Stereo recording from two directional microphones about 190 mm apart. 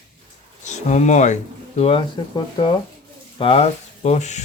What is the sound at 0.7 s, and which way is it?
Speech, 40° left (ahead or behind).